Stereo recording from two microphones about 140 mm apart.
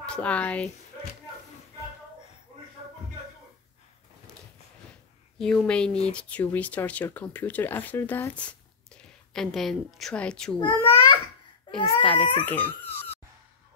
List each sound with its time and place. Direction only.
0.0 s speech: 10° left (ahead or behind)
5.4 s a woman's voice: 5° left (ahead or behind)
11.7 s baby cry: 35° left (ahead or behind)
12.0 s speech: 10° left (ahead or behind)